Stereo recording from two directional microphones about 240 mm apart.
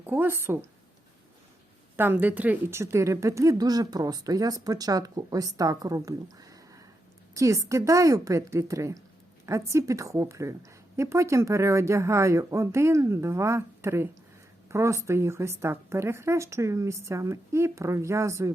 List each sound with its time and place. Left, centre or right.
0.0 s a woman's voice: centre
2.0 s a woman's voice: centre